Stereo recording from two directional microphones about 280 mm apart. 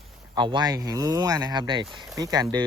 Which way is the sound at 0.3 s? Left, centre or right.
Centre.